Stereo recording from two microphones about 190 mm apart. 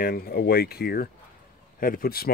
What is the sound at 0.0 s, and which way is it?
Speech, 55° left (ahead or behind).